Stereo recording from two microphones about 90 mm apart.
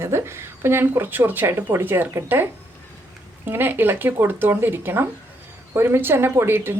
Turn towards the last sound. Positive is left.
turn(degrees=-25)  # may be behind; listen again after turning